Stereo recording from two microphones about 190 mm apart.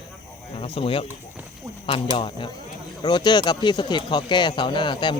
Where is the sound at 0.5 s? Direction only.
30° left (ahead or behind).